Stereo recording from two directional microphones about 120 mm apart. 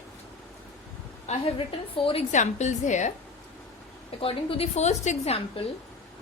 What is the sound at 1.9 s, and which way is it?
Speech, 50° left (ahead or behind).